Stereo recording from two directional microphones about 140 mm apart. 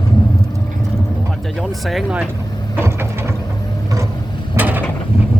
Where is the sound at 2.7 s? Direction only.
15° right (ahead or behind).